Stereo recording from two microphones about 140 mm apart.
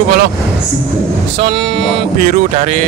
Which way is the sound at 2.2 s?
60° right (ahead or behind).